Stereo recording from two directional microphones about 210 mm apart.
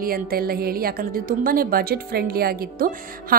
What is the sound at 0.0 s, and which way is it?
A woman's voice, 45° right (ahead or behind).